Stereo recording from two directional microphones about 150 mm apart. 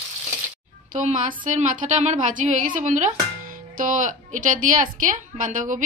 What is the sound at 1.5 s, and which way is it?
A woman's voice, 55° right (ahead or behind).